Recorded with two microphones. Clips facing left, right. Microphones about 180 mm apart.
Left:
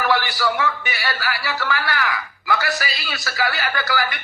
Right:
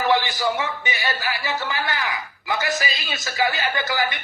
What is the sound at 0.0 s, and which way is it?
A man's voice, 20° right (ahead or behind).